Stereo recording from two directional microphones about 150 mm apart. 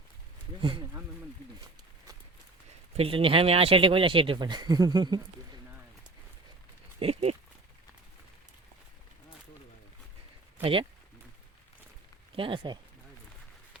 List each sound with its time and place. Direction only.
0.6 s speech: 35° right (ahead or behind)
3.0 s speech: 35° right (ahead or behind)
7.0 s speech: 45° right (ahead or behind)
10.6 s speech: 35° right (ahead or behind)
12.4 s speech: 35° right (ahead or behind)